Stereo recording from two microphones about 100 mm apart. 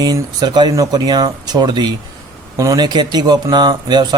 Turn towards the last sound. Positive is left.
turn(degrees=-45)  # may be behind; listen again after turning